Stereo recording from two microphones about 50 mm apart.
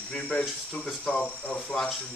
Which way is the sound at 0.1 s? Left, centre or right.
Left.